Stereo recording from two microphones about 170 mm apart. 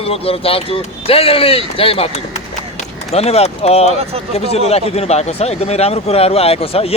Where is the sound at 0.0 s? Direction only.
35° left (ahead or behind).